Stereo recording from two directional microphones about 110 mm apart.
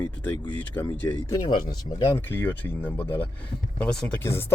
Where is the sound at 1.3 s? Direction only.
35° left (ahead or behind); by 3.2 s 15° left (ahead or behind).